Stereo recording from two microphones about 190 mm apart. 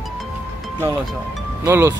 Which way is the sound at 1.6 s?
15° right (ahead or behind).